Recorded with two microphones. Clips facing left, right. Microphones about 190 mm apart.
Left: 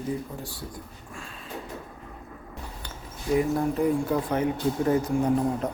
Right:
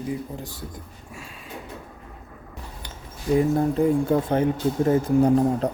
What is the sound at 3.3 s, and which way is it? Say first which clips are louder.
Speech: right 4 dB; 30° right (ahead or behind).